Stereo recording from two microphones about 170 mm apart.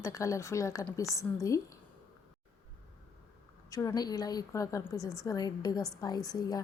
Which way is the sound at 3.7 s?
20° left (ahead or behind).